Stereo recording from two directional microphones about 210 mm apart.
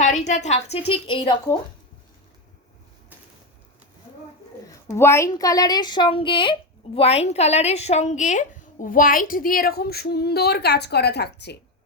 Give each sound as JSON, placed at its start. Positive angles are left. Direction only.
{"t": 0.0, "sound": "a woman's voice", "side_deg": 35}
{"t": 4.6, "sound": "a woman's voice", "side_deg": 15}